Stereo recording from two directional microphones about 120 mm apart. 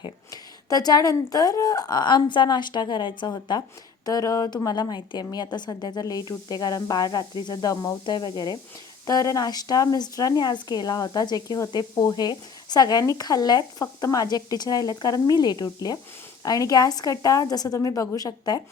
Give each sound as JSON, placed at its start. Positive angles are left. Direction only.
{"t": 0.3, "sound": "a woman's voice", "side_deg": 30}